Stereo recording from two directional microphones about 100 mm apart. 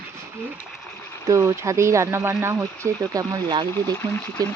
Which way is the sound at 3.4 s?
55° right (ahead or behind).